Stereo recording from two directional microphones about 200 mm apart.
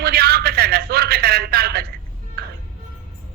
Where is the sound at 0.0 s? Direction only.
50° right (ahead or behind).